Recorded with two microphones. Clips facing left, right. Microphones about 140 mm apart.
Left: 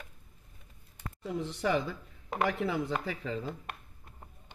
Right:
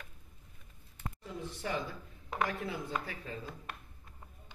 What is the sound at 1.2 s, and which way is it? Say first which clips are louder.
Speech: left 9 dB; 90° left.